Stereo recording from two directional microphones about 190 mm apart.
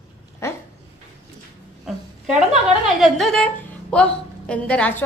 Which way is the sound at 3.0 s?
Centre (ahead or behind).